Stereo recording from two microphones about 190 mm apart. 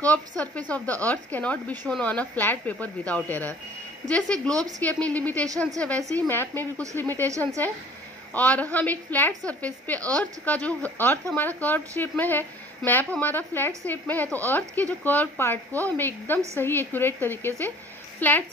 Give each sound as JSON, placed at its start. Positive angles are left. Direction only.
{"t": 0.4, "sound": "a woman's voice", "side_deg": 5}
{"t": 7.2, "sound": "a woman's voice", "side_deg": -15}
{"t": 8.3, "sound": "a woman's voice", "side_deg": 10}